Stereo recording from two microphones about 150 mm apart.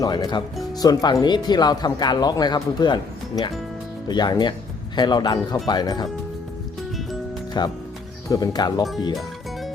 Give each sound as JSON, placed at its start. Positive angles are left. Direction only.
{"t": 0.0, "sound": "speech", "side_deg": 25}
{"t": 7.6, "sound": "speech", "side_deg": 30}
{"t": 9.1, "sound": "music", "side_deg": 0}